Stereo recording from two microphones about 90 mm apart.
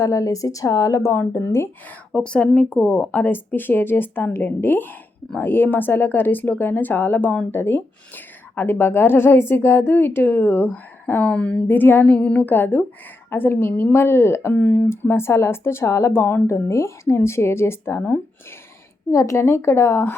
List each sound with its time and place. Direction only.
0.0 s a woman's voice: 40° left (ahead or behind)
2.1 s speech: 10° left (ahead or behind)
3.1 s speech: 20° left (ahead or behind)